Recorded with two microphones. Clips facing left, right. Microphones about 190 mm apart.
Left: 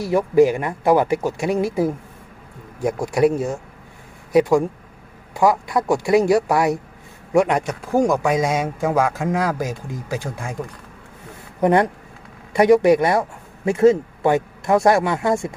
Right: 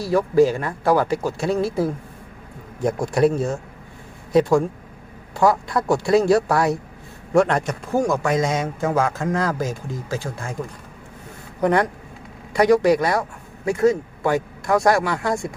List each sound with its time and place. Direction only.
0.0 s a man's voice: 20° left (ahead or behind)
11.6 s speech: 20° left (ahead or behind)